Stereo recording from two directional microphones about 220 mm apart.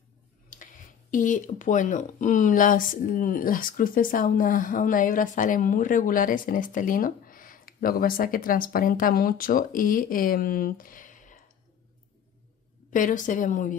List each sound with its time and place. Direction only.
0.5 s speech: 35° left (ahead or behind)
12.9 s speech: 35° left (ahead or behind)